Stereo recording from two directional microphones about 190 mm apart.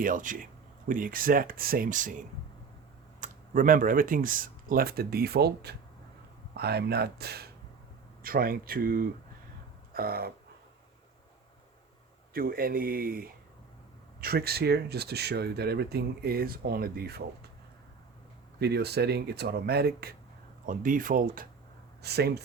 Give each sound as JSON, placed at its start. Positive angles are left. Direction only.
{"t": 0.0, "sound": "speech", "side_deg": -45}
{"t": 9.9, "sound": "a sound", "side_deg": -55}
{"t": 12.3, "sound": "speech", "side_deg": -50}
{"t": 18.6, "sound": "speech", "side_deg": -60}
{"t": 20.7, "sound": "speech", "side_deg": -45}
{"t": 22.0, "sound": "speech", "side_deg": -60}